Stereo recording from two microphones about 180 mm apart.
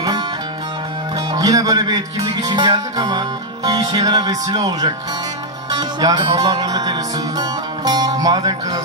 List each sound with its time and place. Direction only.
1.3 s music: 20° right (ahead or behind)